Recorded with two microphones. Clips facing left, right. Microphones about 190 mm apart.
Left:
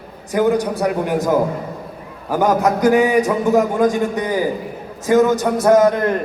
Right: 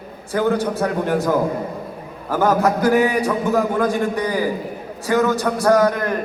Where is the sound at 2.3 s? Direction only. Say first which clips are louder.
Left 1 dB; 15° left (ahead or behind).